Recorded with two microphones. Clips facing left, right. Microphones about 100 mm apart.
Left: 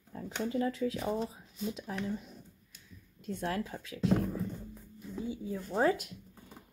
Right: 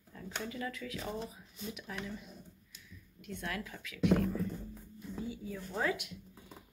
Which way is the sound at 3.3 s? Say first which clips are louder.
Left 6 dB; 35° left (ahead or behind).